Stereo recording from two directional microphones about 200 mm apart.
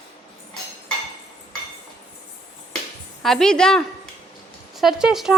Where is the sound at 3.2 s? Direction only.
Centre (ahead or behind).